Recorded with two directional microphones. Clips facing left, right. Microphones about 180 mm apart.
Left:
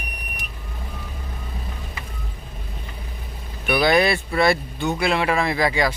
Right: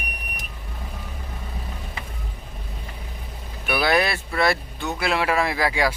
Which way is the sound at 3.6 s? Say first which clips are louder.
Left 3 dB; 5° right (ahead or behind).